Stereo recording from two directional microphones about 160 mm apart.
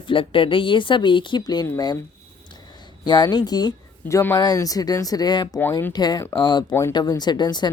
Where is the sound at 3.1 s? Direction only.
25° left (ahead or behind).